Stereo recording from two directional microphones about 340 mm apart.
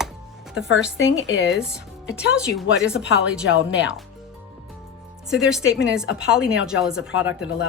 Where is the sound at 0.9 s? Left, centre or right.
Left.